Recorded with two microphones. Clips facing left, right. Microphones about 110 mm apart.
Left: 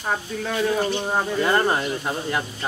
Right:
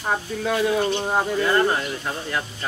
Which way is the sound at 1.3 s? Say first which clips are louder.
Left 1 dB; 25° left (ahead or behind).